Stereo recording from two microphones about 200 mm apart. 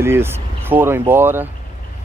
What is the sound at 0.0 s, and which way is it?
Speech, 10° right (ahead or behind).